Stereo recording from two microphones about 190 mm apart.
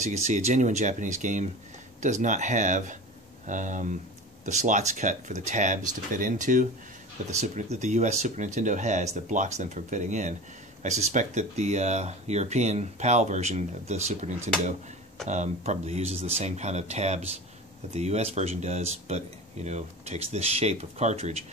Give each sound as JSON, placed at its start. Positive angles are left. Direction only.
{"t": 0.0, "sound": "speech", "side_deg": -35}